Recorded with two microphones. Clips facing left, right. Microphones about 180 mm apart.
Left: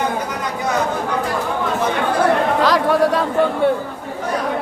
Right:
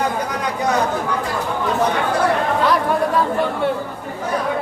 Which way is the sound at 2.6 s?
90° left.